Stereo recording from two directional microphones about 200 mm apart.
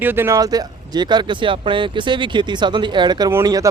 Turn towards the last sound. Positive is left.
turn(degrees=-15)  # may be behind; listen again after turning